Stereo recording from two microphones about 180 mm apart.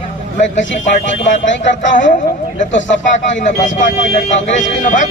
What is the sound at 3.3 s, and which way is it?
Speech, 40° left (ahead or behind).